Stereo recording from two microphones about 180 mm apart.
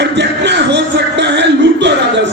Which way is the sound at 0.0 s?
75° right (ahead or behind).